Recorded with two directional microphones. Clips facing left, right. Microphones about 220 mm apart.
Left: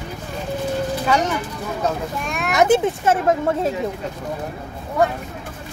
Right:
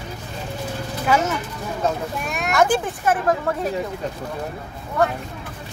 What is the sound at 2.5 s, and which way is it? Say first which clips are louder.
Speech: left 4 dB; 20° left (ahead or behind).